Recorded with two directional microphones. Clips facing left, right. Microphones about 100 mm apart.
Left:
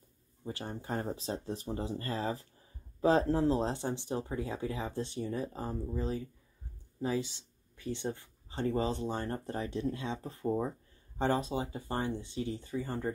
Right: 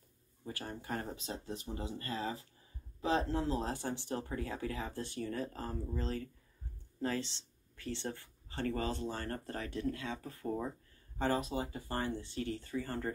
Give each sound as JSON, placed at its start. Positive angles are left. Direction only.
{"t": 0.4, "sound": "speech", "side_deg": 20}